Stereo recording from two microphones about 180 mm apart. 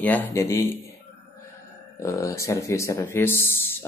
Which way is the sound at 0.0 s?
10° left (ahead or behind).